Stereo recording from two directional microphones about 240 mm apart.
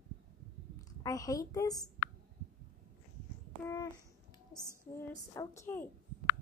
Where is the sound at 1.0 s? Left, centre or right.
Centre.